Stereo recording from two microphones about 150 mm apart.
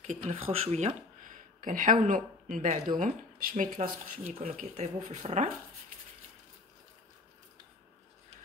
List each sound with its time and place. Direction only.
0.0 s speech: 45° right (ahead or behind)